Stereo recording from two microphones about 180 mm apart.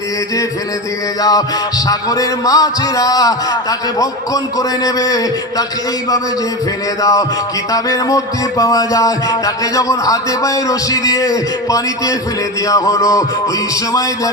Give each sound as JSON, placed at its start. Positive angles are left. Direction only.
{"t": 1.2, "sound": "music", "side_deg": 20}
{"t": 7.0, "sound": "music", "side_deg": 20}